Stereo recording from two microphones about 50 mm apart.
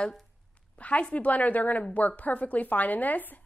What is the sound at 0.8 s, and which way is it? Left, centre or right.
A woman's voice, left.